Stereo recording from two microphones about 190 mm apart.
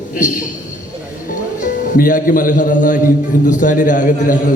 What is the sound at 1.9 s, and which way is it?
A man's voice, 45° left (ahead or behind).